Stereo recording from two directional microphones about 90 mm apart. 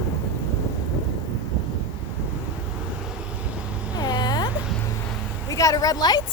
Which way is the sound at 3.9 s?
50° left (ahead or behind).